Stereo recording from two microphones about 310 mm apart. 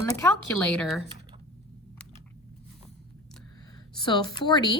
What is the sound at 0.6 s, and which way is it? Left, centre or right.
Speech, centre.